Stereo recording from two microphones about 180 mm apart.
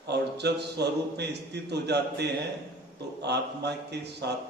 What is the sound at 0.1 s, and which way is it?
A man's voice, 70° right (ahead or behind).